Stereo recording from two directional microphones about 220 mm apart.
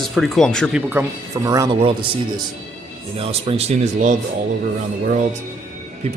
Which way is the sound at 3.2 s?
25° right (ahead or behind).